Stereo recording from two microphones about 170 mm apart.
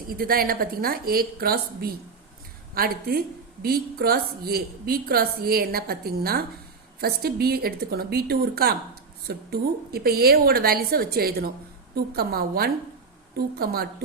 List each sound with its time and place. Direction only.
0.1 s a woman's voice: 60° right (ahead or behind)